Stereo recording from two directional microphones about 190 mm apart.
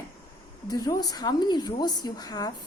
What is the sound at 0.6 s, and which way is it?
A woman's voice, 20° left (ahead or behind).